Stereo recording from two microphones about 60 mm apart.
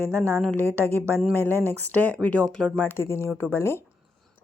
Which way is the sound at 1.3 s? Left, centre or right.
Left.